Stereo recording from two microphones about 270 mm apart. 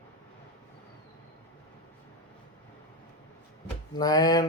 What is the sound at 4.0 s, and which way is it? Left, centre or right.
Speech, centre.